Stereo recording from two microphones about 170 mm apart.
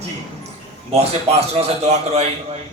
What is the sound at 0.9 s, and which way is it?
Speech, 40° right (ahead or behind).